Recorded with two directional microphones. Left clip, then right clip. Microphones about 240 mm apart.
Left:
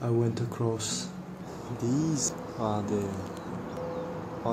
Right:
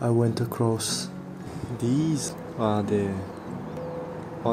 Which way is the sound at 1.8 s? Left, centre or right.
Right.